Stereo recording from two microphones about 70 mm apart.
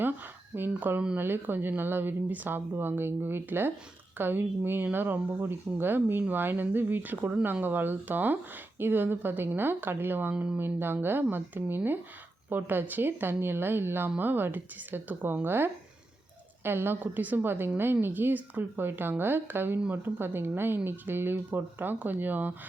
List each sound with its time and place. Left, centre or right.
0.5 s a woman's voice: right